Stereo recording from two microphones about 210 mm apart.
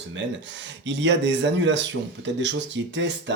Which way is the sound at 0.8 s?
60° right (ahead or behind).